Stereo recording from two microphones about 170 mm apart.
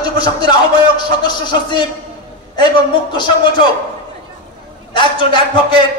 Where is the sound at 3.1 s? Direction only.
25° left (ahead or behind).